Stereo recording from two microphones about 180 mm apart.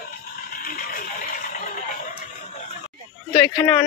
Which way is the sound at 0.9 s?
50° left (ahead or behind).